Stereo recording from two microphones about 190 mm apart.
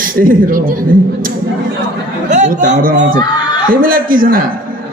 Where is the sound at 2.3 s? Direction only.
40° right (ahead or behind).